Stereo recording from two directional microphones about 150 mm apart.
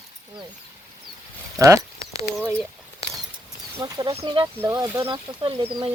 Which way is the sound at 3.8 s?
25° right (ahead or behind).